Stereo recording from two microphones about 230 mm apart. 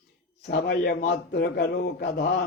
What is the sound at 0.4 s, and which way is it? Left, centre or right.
A man's voice, left.